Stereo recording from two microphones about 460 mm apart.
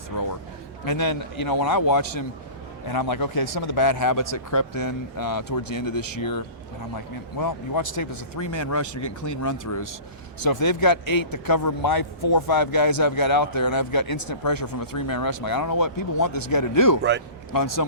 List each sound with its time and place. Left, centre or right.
0.1 s a sound: left
0.9 s a man's voice: left
17.0 s speech: right
17.5 s a man's voice: left